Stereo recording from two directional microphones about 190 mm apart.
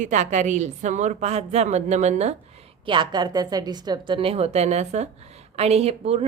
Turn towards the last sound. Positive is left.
turn(degrees=-35)  # may be behind; listen again after turning